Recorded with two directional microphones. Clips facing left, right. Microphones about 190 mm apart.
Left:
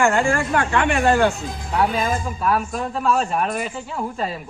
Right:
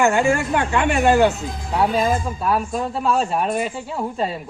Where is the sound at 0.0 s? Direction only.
15° right (ahead or behind).